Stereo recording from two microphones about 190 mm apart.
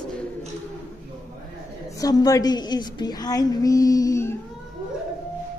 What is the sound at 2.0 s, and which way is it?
A woman's voice, 20° left (ahead or behind).